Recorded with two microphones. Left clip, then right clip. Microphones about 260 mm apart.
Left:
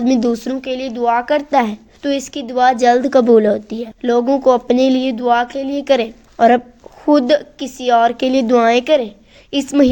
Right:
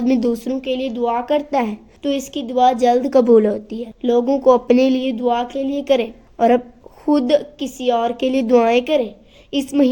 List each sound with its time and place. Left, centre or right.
0.0 s speech: centre
0.7 s speech: left
0.9 s a woman's voice: left
4.0 s a woman's voice: left
4.4 s speech: centre
5.0 s a woman's voice: left
8.4 s a woman's voice: centre